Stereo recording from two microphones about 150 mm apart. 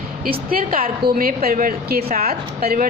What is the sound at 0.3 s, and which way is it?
A woman's voice, 70° right (ahead or behind).